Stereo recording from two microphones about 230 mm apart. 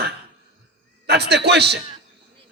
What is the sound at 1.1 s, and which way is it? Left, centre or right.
Speech, right.